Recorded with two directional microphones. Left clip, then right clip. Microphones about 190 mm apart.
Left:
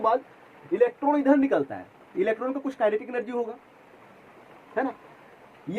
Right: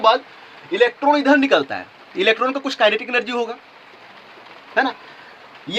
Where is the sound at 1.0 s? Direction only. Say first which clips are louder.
Right 7 dB; 15° right (ahead or behind).